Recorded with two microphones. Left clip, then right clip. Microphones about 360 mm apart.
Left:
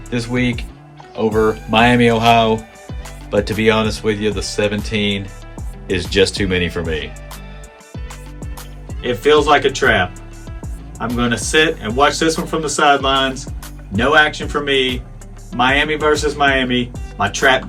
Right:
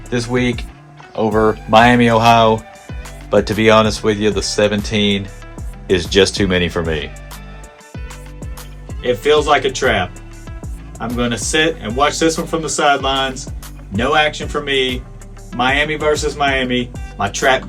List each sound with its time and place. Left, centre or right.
0.1 s speech: right
2.6 s music: centre
3.2 s speech: right
7.9 s music: centre
10.6 s speech: centre